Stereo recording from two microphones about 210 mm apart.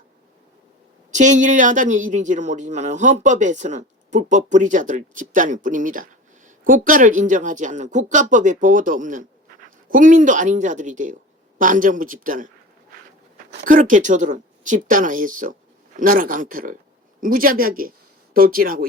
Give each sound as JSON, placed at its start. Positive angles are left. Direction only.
{"t": 1.1, "sound": "speech", "side_deg": -35}
{"t": 13.5, "sound": "speech", "side_deg": -40}